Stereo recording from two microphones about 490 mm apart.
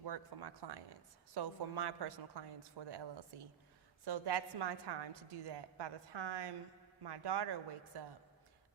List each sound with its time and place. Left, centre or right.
0.0 s a woman's voice: right